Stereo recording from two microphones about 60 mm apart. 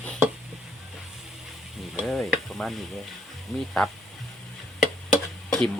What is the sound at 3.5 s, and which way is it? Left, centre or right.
Speech, centre.